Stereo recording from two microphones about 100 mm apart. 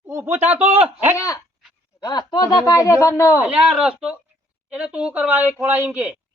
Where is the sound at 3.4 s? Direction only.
10° right (ahead or behind).